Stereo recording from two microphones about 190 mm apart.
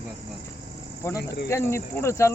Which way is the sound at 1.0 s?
15° left (ahead or behind).